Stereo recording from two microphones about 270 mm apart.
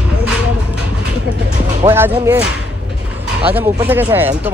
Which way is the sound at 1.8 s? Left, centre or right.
Centre.